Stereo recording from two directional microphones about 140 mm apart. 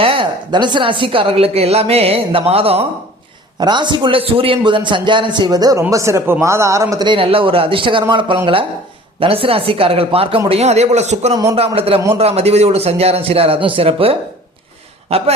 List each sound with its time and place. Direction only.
0.0 s a woman's voice: 40° right (ahead or behind)
3.6 s a man's voice: 35° right (ahead or behind)
7.1 s a man's voice: 40° right (ahead or behind)